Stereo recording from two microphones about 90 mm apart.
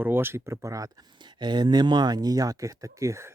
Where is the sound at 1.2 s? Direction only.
55° right (ahead or behind); by 3.3 s 35° right (ahead or behind).